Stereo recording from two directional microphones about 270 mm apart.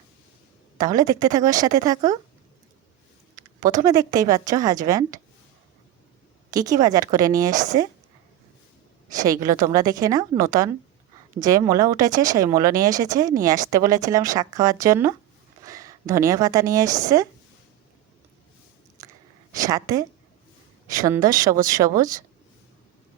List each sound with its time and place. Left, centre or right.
0.8 s a woman's voice: centre
3.3 s a sound: centre
3.8 s a woman's voice: centre
6.5 s a woman's voice: centre
9.2 s a woman's voice: centre
19.0 s chewing: centre
19.6 s a woman's voice: centre